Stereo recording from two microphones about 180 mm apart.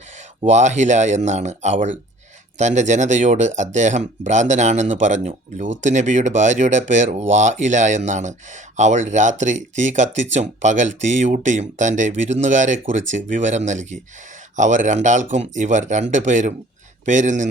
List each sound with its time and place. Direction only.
0.2 s speech: 40° right (ahead or behind)